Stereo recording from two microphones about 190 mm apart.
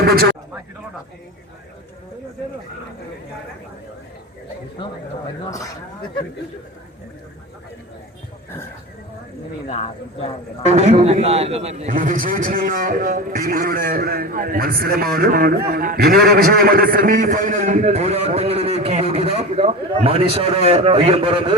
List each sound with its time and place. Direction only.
0.0 s speech: 55° right (ahead or behind)
5.5 s speech: 15° left (ahead or behind)
9.6 s speech: 30° left (ahead or behind)
10.7 s a man's voice: 35° right (ahead or behind)